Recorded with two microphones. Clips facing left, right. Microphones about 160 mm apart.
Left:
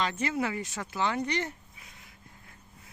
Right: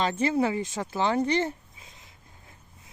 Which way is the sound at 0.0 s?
30° right (ahead or behind).